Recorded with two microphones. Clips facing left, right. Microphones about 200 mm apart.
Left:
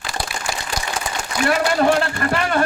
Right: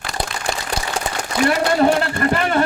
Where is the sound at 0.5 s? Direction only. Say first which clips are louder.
Right 3 dB; 25° right (ahead or behind).